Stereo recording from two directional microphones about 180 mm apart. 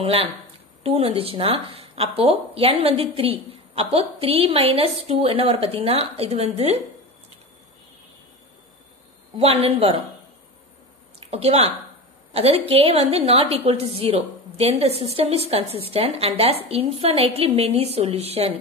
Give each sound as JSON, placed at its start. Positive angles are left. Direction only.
{"t": 0.0, "sound": "a woman's voice", "side_deg": -30}
{"t": 9.4, "sound": "a woman's voice", "side_deg": -35}
{"t": 11.1, "sound": "a woman's voice", "side_deg": -35}